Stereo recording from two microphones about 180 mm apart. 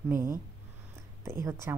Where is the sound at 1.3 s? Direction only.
15° right (ahead or behind).